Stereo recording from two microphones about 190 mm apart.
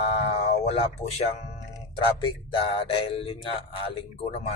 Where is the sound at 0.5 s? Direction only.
35° left (ahead or behind).